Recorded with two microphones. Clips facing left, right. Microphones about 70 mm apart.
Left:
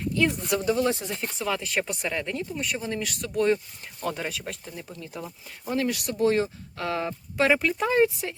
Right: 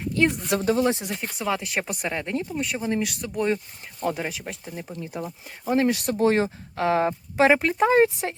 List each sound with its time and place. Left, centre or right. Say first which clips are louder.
0.2 s speech: right 3 dB; right
0.8 s speech: right 2 dB; centre
2.6 s speech: right 4 dB; centre
4.7 s speech: right 4 dB; right
7.1 s speech: right 4 dB; right